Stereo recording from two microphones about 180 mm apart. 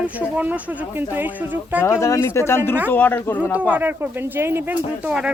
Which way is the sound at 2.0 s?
15° left (ahead or behind).